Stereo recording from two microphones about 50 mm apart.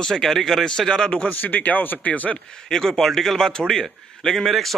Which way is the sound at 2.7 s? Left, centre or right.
Centre.